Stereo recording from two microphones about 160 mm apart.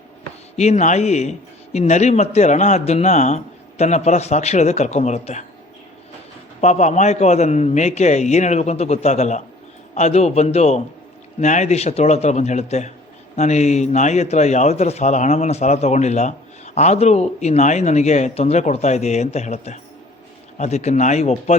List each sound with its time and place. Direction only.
0.5 s a man's voice: 45° left (ahead or behind)
6.6 s a man's voice: 45° left (ahead or behind)